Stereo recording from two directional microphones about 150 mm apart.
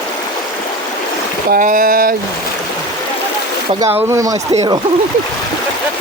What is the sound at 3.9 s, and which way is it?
Speech, 20° right (ahead or behind).